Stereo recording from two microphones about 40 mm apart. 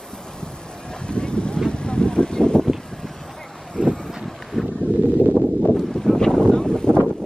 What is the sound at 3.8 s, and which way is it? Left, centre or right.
Vehicle, centre.